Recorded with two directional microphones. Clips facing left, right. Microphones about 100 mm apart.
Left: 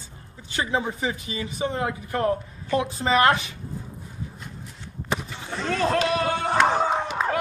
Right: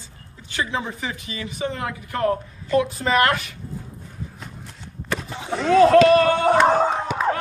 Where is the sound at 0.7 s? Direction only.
30° left (ahead or behind).